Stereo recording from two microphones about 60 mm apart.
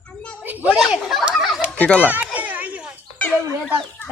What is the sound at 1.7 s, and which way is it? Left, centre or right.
Speech, left.